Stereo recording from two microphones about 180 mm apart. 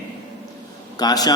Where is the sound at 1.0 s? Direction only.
20° left (ahead or behind).